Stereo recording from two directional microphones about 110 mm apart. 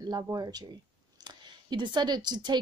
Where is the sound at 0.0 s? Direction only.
40° right (ahead or behind).